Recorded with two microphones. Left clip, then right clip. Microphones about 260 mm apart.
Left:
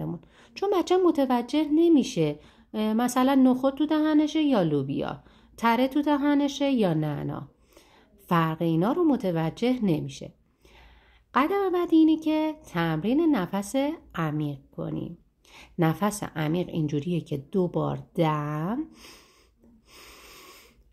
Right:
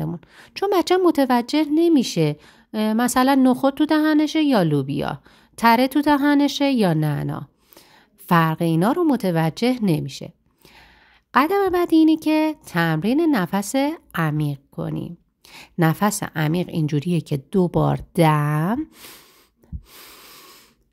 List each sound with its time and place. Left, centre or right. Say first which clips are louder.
0.6 s a woman's voice: right 5 dB; right
11.3 s a woman's voice: right 6 dB; right
18.4 s a woman's voice: right 7 dB; right
19.9 s wheeze: right 3 dB; right